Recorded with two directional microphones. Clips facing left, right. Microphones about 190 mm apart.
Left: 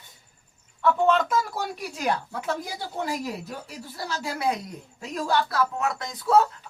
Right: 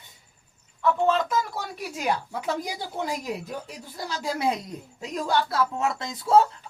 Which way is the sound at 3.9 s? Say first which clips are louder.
Right 2 dB; 15° right (ahead or behind).